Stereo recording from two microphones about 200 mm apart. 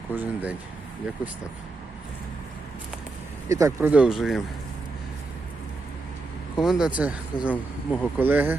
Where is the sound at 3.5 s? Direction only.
15° right (ahead or behind).